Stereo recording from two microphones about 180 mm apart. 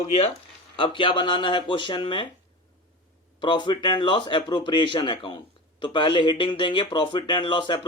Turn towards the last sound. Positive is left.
turn(degrees=25)  # may be behind; listen again after turning